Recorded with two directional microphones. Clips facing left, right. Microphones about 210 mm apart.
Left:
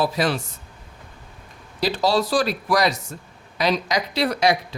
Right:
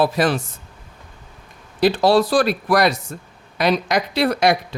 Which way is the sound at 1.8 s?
55° right (ahead or behind).